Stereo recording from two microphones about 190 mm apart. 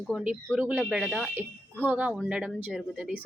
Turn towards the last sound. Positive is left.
turn(degrees=-5)  # may be behind; listen again after turning